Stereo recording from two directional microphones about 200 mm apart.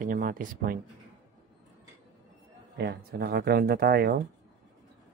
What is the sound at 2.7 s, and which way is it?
Speech, 55° right (ahead or behind).